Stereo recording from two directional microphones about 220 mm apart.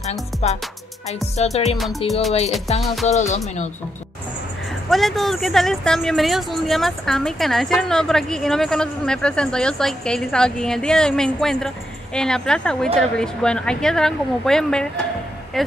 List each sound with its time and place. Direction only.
0.4 s speech: 30° left (ahead or behind)
4.8 s speech: centre (ahead or behind)